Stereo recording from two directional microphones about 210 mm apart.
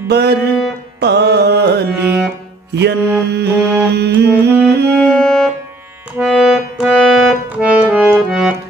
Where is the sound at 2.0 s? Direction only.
10° right (ahead or behind).